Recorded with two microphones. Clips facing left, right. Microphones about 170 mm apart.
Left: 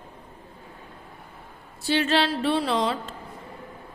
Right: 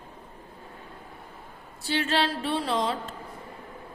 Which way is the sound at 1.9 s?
90° left.